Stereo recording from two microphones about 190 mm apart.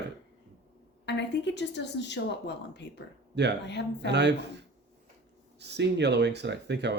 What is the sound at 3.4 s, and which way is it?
Speech, 65° right (ahead or behind).